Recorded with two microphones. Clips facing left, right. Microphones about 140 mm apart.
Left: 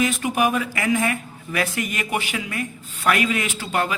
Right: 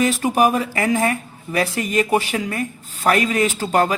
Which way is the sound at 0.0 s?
35° right (ahead or behind).